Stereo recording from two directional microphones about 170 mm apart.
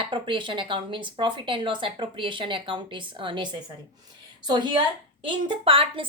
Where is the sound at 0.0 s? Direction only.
30° right (ahead or behind).